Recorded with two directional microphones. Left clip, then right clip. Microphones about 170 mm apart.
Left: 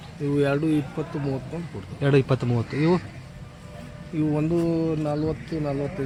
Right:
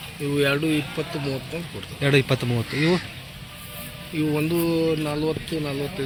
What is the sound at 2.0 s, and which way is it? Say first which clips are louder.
Speech: right 1 dB; 5° left (ahead or behind).